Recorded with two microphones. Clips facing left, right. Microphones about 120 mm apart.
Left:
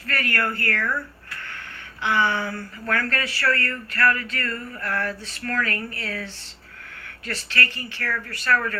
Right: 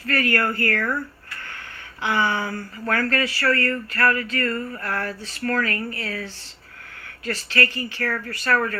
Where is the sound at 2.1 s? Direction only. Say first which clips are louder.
Even; 40° right (ahead or behind).